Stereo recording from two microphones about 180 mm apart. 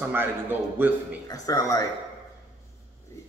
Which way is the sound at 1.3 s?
20° left (ahead or behind).